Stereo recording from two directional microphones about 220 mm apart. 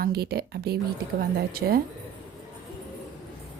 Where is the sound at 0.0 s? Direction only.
45° right (ahead or behind).